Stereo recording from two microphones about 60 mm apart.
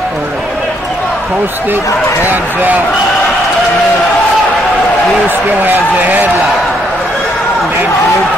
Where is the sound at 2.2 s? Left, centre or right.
Right.